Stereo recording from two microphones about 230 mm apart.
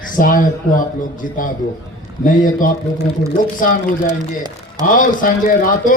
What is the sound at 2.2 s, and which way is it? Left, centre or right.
A man's voice, left.